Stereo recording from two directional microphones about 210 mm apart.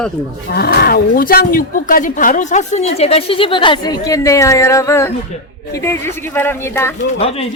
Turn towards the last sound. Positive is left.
turn(degrees=30)  # may be behind; listen again after turning